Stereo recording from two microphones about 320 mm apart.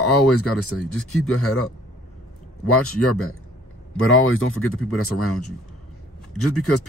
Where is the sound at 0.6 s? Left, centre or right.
Left.